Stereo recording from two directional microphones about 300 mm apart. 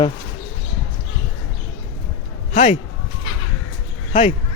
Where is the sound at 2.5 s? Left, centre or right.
Left.